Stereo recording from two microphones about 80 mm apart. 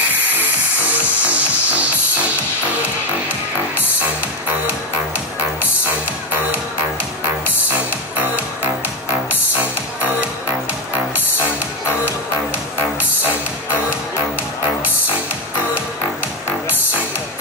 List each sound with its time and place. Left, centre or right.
1.2 s music: centre